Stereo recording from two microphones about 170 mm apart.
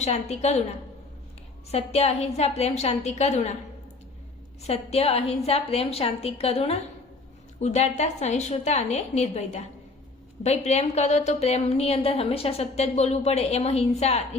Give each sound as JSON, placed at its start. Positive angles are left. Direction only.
{"t": 0.0, "sound": "a woman's voice", "side_deg": 40}
{"t": 1.7, "sound": "a woman's voice", "side_deg": 35}
{"t": 4.6, "sound": "a woman's voice", "side_deg": 35}